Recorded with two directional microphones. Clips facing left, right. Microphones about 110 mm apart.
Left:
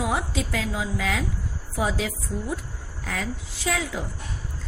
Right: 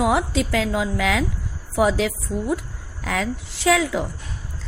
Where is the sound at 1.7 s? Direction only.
75° right (ahead or behind).